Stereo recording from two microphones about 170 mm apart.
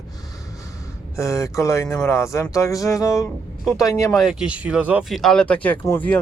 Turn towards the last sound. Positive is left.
turn(degrees=10)  # may be behind; listen again after turning